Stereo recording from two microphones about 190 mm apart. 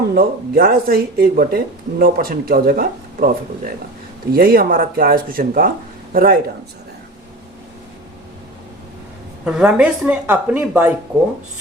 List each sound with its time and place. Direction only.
0.1 s speech: 50° right (ahead or behind)
9.4 s speech: 5° right (ahead or behind)